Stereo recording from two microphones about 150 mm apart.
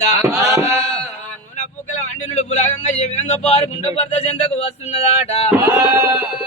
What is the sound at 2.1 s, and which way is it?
Speech, 50° left (ahead or behind).